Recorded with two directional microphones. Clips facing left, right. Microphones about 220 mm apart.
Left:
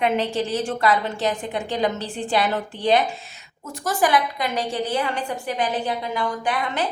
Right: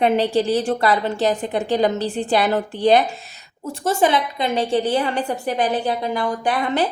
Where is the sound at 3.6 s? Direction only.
25° right (ahead or behind).